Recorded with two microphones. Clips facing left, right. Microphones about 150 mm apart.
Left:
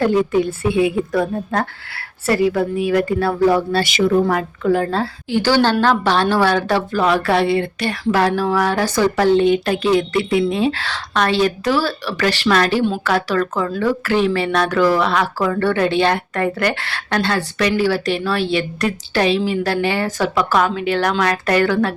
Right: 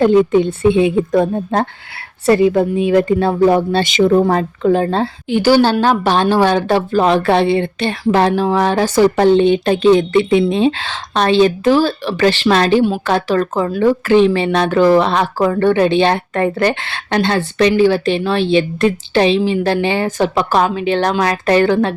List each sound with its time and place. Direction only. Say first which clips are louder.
0.0 s speech: right 5 dB; 20° right (ahead or behind)
4.1 s speech: right 4 dB; 35° right (ahead or behind)